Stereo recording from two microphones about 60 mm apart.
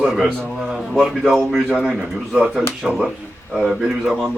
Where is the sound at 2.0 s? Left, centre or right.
Centre.